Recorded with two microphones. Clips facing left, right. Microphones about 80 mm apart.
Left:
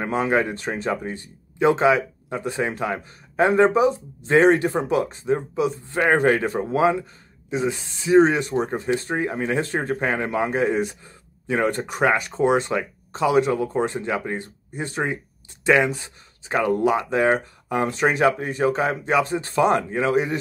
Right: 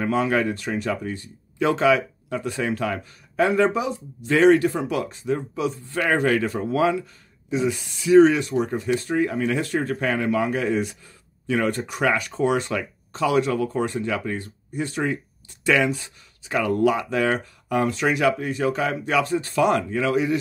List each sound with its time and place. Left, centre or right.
0.0 s speech: left
6.1 s speech: left